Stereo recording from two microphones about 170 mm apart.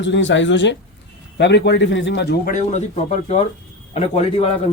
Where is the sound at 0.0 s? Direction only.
90° left.